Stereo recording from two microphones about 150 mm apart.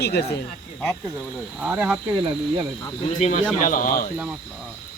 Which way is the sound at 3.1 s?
55° left (ahead or behind).